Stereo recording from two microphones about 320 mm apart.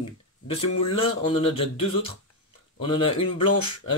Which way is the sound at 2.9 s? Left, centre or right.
Centre.